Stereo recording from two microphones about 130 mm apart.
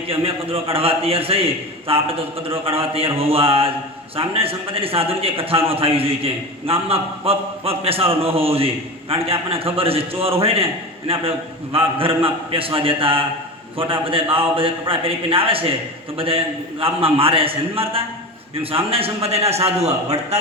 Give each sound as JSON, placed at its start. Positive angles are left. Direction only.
{"t": 0.1, "sound": "a man's voice", "side_deg": -45}